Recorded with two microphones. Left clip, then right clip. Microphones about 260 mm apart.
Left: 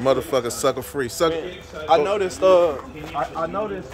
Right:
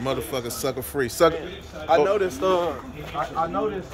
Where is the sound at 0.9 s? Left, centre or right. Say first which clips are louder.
Right 2 dB; centre.